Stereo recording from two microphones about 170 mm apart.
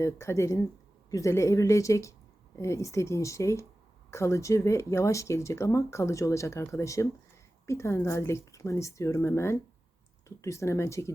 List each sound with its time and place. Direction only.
0.0 s speech: 15° left (ahead or behind)